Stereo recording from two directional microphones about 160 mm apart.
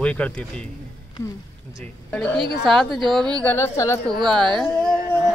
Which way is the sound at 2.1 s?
5° left (ahead or behind).